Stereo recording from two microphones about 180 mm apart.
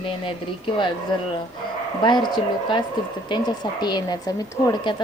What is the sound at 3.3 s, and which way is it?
Speech, 25° left (ahead or behind).